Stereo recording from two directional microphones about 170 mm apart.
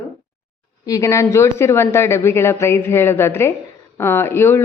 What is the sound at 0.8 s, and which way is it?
Speech, 20° left (ahead or behind).